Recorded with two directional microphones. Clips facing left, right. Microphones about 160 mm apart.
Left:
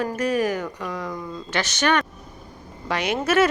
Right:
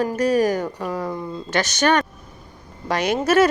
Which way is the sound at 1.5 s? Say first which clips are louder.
Right 3 dB; 40° right (ahead or behind).